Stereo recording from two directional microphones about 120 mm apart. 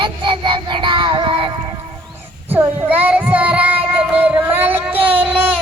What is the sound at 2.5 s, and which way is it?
Child singing, 15° right (ahead or behind).